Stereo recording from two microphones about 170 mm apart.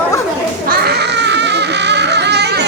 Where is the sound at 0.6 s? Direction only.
70° right (ahead or behind).